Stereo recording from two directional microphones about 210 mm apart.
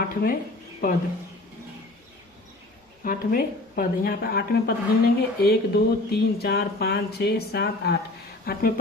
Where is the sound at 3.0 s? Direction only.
40° left (ahead or behind).